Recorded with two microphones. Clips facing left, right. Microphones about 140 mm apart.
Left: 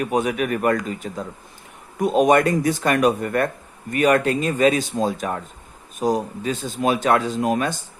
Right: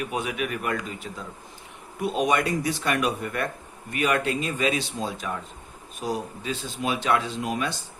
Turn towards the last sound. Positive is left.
turn(degrees=45)  # may be behind; listen again after turning